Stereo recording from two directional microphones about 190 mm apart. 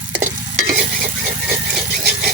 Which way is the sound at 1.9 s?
50° right (ahead or behind).